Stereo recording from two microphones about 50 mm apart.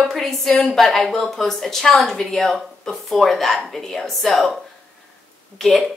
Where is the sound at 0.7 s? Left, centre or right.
Centre.